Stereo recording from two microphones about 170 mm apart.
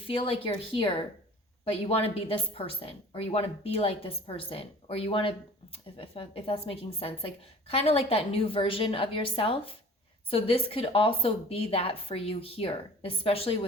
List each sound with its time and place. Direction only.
0.0 s a woman's voice: 30° left (ahead or behind)